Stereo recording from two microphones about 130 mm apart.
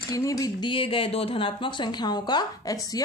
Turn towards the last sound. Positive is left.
turn(degrees=25)  # may be behind; listen again after turning